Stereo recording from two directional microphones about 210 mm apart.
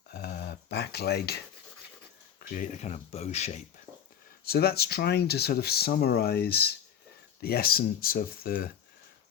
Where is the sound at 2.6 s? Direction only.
35° left (ahead or behind).